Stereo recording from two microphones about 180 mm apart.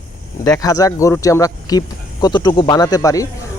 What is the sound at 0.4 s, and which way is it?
Speech, 20° left (ahead or behind).